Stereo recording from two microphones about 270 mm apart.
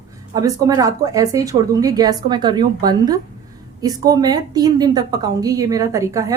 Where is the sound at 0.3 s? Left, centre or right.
Centre.